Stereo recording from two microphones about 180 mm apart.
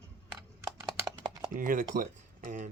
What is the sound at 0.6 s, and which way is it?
Horse, 15° right (ahead or behind).